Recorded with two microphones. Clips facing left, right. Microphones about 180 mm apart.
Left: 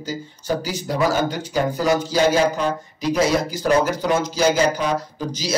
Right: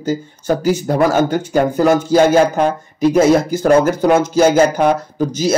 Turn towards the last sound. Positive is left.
turn(degrees=-55)  # may be behind; listen again after turning